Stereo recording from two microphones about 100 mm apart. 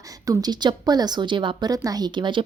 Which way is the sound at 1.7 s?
40° right (ahead or behind).